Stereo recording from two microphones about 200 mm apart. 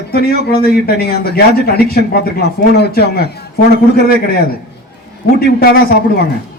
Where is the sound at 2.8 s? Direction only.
55° left (ahead or behind).